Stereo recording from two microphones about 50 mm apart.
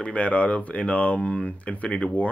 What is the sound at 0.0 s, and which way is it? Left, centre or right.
Speech, left.